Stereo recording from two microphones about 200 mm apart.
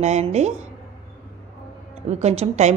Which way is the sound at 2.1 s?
35° right (ahead or behind).